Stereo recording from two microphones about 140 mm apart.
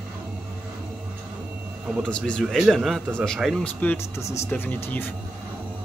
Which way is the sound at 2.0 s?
5° left (ahead or behind).